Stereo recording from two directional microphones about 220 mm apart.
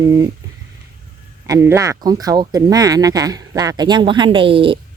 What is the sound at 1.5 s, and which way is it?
Speech, 10° right (ahead or behind).